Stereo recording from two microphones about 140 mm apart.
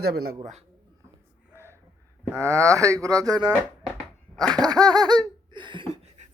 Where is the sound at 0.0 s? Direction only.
90° right.